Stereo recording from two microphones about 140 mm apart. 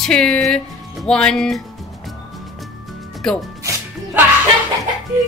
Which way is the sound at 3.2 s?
5° left (ahead or behind).